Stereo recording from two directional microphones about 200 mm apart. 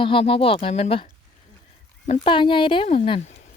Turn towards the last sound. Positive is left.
turn(degrees=30)  # may be behind; listen again after turning